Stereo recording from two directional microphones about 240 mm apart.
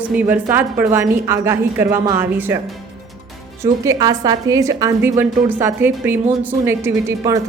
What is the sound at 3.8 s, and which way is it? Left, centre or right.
Speech, centre.